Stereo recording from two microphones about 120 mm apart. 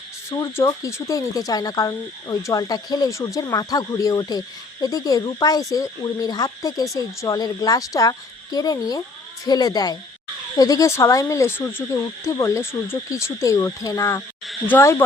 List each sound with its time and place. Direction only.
0.3 s speech: 25° left (ahead or behind)